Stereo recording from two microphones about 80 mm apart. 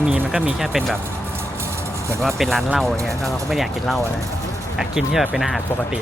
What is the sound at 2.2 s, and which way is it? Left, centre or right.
Speech, centre.